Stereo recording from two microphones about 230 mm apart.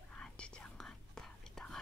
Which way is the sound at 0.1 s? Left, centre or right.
Centre.